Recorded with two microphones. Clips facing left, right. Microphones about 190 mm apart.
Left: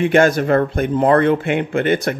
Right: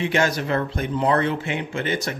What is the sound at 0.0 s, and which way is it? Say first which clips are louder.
Speech: left 8 dB; 55° left (ahead or behind).